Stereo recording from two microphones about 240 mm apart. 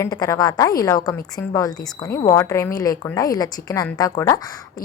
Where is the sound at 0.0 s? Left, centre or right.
Centre.